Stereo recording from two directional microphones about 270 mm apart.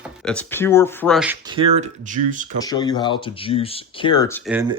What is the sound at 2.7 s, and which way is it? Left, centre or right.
Speech, centre.